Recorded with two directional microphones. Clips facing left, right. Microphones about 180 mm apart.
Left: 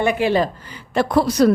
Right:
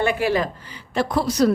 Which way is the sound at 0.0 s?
20° left (ahead or behind).